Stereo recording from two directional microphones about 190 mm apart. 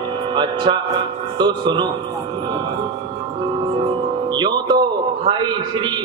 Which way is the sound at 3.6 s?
25° right (ahead or behind).